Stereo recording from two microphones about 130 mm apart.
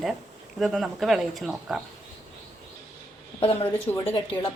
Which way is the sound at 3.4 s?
50° left (ahead or behind).